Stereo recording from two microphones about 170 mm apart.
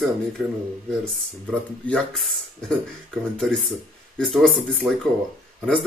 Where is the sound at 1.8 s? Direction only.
Centre (ahead or behind).